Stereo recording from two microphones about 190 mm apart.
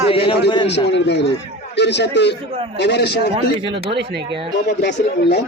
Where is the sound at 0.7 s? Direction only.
65° left (ahead or behind).